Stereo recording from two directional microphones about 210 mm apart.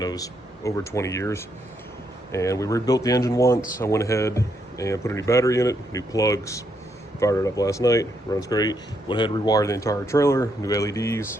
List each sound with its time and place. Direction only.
0.0 s speech: 15° left (ahead or behind)